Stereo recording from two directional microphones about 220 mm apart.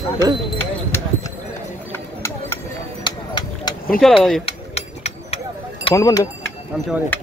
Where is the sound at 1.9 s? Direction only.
10° left (ahead or behind).